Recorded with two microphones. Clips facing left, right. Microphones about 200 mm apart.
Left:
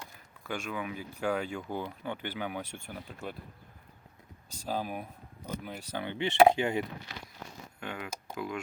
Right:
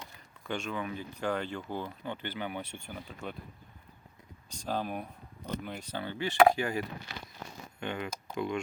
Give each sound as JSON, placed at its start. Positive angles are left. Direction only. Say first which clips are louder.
{"t": 0.0, "sound": "speech", "louder": "even", "side_deg": 10}
{"t": 4.4, "sound": "speech", "louder": "even", "side_deg": 5}
{"t": 7.8, "sound": "speech", "louder": "right 3 dB", "side_deg": 5}